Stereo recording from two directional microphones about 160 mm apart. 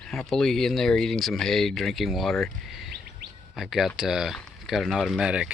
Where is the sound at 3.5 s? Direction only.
Centre (ahead or behind).